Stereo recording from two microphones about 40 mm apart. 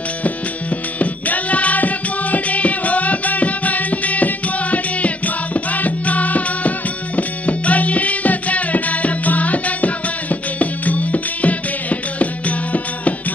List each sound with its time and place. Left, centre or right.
0.9 s music: left